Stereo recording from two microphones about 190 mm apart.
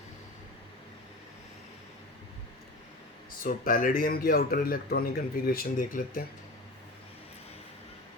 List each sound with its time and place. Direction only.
3.4 s speech: 50° left (ahead or behind)